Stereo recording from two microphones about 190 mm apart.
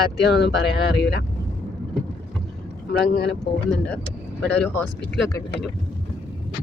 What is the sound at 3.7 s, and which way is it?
Speech, 5° left (ahead or behind).